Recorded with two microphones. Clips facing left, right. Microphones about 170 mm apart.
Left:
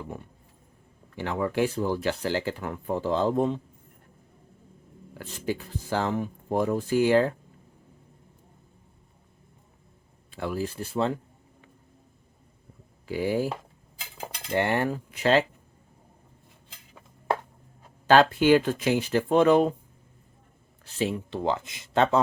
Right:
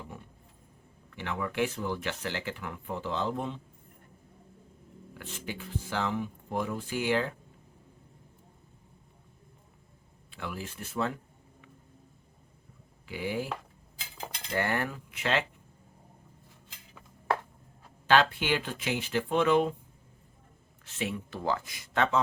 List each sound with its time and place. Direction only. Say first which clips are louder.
1.1 s speech: left 6 dB; 35° left (ahead or behind)
5.1 s speech: left 9 dB; 40° left (ahead or behind)
10.3 s speech: left 9 dB; 40° left (ahead or behind)
13.1 s speech: left 7 dB; 40° left (ahead or behind)
14.5 s speech: left 6 dB; 25° left (ahead or behind)
18.1 s speech: left 7 dB; 40° left (ahead or behind)
20.8 s speech: left 6 dB; 30° left (ahead or behind)